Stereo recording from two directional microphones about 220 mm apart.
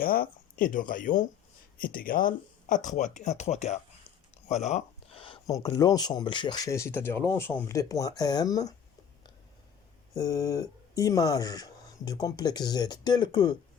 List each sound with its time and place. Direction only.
0.0 s speech: 40° left (ahead or behind); by 8.7 s 15° left (ahead or behind)
10.2 s speech: 15° left (ahead or behind)